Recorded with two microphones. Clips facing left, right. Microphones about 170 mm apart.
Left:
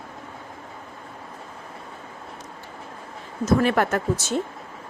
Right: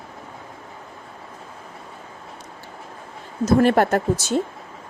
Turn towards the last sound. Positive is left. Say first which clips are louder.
# right 4 dB
turn(degrees=-35)  # may be behind; listen again after turning